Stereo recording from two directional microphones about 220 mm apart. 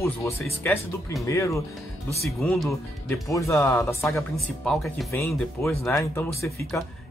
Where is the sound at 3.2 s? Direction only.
15° left (ahead or behind).